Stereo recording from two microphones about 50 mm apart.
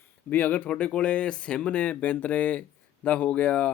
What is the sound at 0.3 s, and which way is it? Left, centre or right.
Speech, left.